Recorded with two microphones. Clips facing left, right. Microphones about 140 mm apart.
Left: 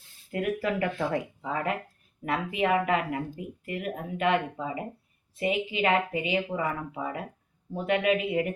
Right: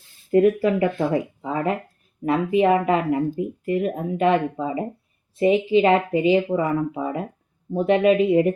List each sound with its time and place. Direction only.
0.3 s speech: 30° right (ahead or behind)